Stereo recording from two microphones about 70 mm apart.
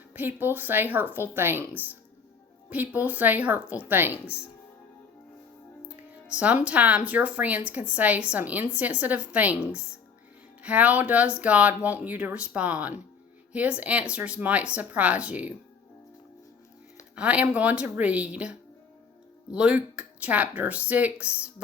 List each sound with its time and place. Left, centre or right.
0.1 s speech: right
6.1 s speech: centre
17.2 s speech: centre